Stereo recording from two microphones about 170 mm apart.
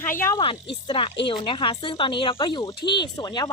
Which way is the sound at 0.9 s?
30° left (ahead or behind).